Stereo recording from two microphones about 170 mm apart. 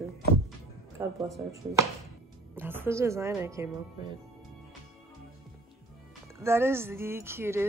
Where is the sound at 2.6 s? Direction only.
10° right (ahead or behind).